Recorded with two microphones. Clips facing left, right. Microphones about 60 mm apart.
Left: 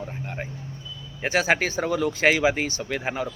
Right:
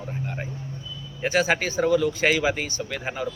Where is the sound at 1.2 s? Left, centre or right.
Left.